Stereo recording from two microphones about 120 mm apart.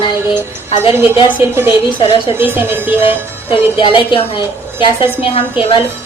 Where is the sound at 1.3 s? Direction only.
20° right (ahead or behind).